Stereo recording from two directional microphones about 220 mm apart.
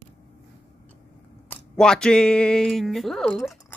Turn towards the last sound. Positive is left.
turn(degrees=0)  # may be behind; listen again after turning